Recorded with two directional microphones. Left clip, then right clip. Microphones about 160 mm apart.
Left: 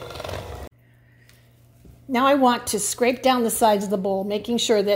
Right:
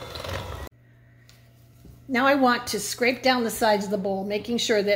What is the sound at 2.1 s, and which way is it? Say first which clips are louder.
A woman's voice: left 2 dB; 40° left (ahead or behind).